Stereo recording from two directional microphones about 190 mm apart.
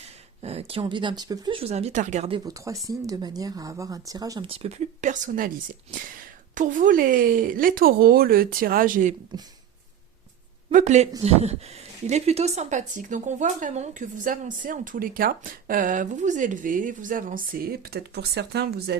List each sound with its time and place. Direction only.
0.0 s speech: 30° right (ahead or behind)
2.4 s speech: 20° right (ahead or behind); by 9.1 s 45° right (ahead or behind)
10.7 s speech: 40° right (ahead or behind); by 18.9 s 60° right (ahead or behind)